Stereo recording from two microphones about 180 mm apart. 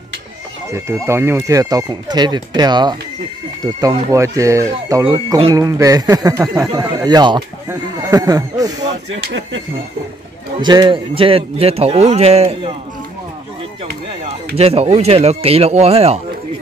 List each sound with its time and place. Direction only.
0.7 s speech: 15° right (ahead or behind)
4.1 s speech: 15° right (ahead or behind)
9.1 s speech: 90° right
10.6 s a man's voice: 25° right (ahead or behind)
14.6 s a man's voice: 35° right (ahead or behind)